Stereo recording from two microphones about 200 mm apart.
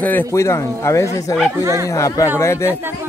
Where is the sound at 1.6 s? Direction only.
15° right (ahead or behind).